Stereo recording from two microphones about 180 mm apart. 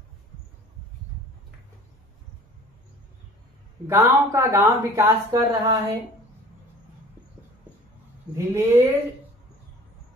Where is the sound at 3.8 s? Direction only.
15° right (ahead or behind).